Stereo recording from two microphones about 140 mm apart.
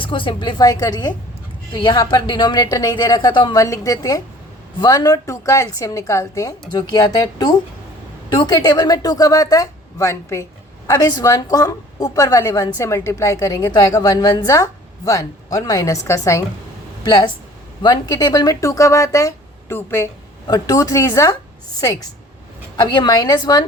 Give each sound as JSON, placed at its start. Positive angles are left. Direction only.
{"t": 0.0, "sound": "a woman's voice", "side_deg": 35}
{"t": 17.0, "sound": "a woman's voice", "side_deg": 35}
{"t": 22.8, "sound": "a woman's voice", "side_deg": 30}